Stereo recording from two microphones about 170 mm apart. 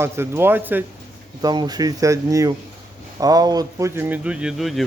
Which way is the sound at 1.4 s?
25° right (ahead or behind).